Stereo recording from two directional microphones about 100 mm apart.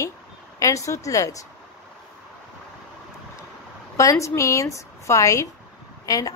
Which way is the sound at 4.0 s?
30° left (ahead or behind).